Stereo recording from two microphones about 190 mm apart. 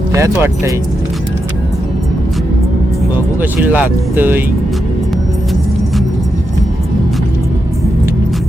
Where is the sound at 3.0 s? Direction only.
10° right (ahead or behind).